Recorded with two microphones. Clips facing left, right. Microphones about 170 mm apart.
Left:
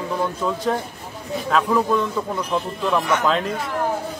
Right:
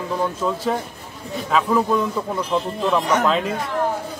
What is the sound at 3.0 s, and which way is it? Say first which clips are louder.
Speech: right 2 dB; 40° right (ahead or behind).